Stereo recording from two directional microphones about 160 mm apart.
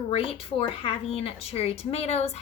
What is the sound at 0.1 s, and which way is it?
A woman's voice, 35° left (ahead or behind).